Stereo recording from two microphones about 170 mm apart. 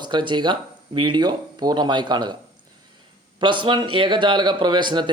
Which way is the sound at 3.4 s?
30° right (ahead or behind).